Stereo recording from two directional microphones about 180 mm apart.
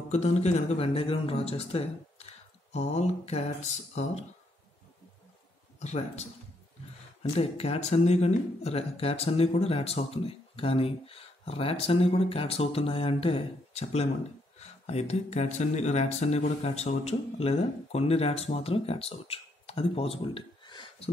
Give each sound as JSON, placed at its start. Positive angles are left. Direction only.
{"t": 0.1, "sound": "speech", "side_deg": 35}
{"t": 5.8, "sound": "speech", "side_deg": 35}
{"t": 7.3, "sound": "speech", "side_deg": 35}